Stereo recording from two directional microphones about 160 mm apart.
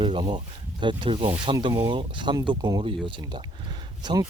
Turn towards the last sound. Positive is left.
turn(degrees=-25)  # may be behind; listen again after turning